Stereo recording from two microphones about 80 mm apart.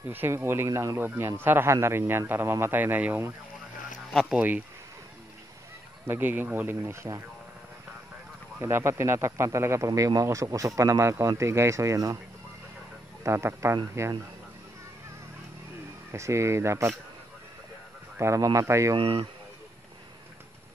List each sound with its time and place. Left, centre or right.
0.1 s speech: right
0.7 s speech: right
0.9 s a man's voice: right
4.1 s speech: centre
4.4 s a man's voice: right
6.0 s a man's voice: right
8.5 s speech: right
13.2 s speech: right
16.1 s speech: right
18.2 s speech: right
18.9 s speech: right